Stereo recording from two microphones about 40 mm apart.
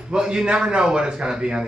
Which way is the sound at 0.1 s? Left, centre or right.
Right.